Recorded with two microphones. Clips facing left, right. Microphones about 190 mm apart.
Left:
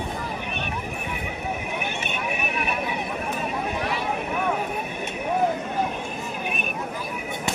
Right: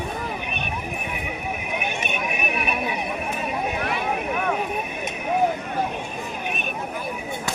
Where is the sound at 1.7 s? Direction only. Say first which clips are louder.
Right 2 dB; 15° right (ahead or behind).